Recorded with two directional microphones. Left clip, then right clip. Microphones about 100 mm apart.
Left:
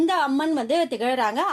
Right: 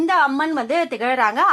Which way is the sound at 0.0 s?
35° left (ahead or behind).